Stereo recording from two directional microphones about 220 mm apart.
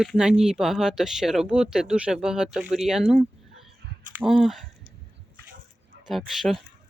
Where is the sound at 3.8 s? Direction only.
50° right (ahead or behind).